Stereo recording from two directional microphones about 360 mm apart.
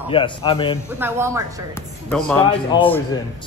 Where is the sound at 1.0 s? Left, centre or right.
Centre.